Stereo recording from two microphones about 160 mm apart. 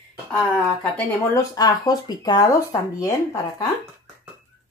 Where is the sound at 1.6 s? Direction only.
25° left (ahead or behind).